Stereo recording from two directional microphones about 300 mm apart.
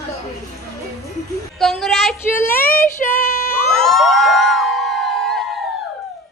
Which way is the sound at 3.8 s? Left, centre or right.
Centre.